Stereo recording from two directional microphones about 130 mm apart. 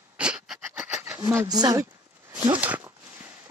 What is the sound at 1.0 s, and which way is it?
Speech, 20° right (ahead or behind).